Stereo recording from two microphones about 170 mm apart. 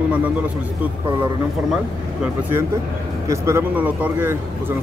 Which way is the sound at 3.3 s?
15° right (ahead or behind).